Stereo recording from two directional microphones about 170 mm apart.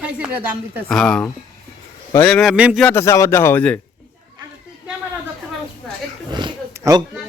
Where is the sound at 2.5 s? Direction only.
5° right (ahead or behind).